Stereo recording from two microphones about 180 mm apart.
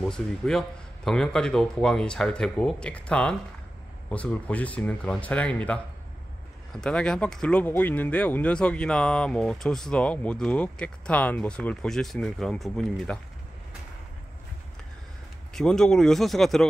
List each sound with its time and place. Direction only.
0.0 s speech: 5° left (ahead or behind)
15.5 s speech: 5° left (ahead or behind)